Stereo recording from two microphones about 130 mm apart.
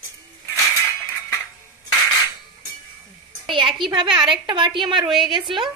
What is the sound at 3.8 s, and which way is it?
Speech, 40° right (ahead or behind).